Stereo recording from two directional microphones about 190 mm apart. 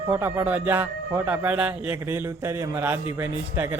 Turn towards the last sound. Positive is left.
turn(degrees=-10)  # may be behind; listen again after turning